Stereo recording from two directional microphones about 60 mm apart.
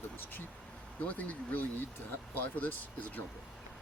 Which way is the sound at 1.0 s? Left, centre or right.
Left.